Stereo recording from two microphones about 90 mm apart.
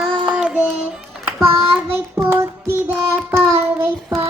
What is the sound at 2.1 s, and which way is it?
Child singing, 30° right (ahead or behind).